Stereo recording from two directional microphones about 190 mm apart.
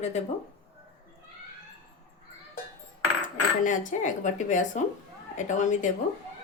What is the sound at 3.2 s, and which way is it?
Speech, 40° left (ahead or behind).